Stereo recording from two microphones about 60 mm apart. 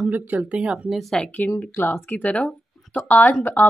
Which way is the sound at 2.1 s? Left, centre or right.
Left.